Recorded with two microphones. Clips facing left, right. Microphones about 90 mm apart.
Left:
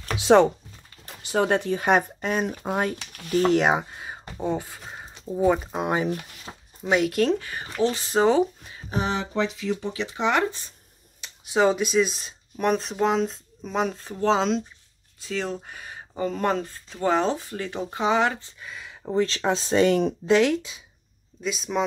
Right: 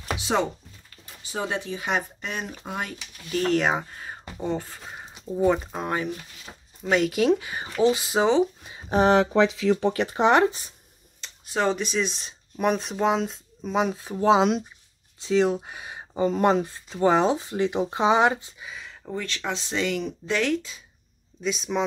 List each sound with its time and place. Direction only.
0.2 s speech: 60° left (ahead or behind); by 3.0 s 35° left (ahead or behind)
3.4 s speech: 15° left (ahead or behind); by 8.5 s centre (ahead or behind)
9.0 s speech: 70° right (ahead or behind)
9.9 s speech: 40° right (ahead or behind)
11.1 s speech: 10° left (ahead or behind); by 18.5 s 20° right (ahead or behind)
18.6 s speech: centre (ahead or behind)
19.0 s speech: 30° left (ahead or behind)
20.2 s speech: 20° left (ahead or behind)
21.4 s speech: centre (ahead or behind)